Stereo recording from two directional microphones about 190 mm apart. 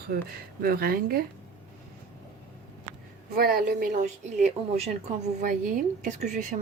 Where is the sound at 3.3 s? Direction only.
50° right (ahead or behind).